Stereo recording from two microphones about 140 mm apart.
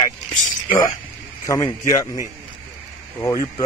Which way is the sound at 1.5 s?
25° left (ahead or behind).